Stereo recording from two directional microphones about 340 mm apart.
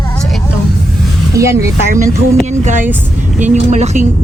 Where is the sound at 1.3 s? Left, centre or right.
Centre.